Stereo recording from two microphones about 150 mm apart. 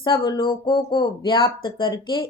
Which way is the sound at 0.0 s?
30° left (ahead or behind).